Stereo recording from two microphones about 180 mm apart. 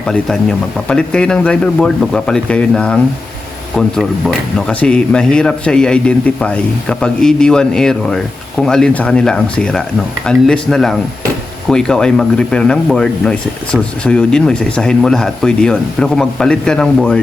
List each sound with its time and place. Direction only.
0.1 s speech: centre (ahead or behind)